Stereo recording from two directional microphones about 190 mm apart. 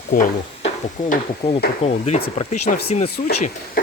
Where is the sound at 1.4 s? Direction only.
30° left (ahead or behind).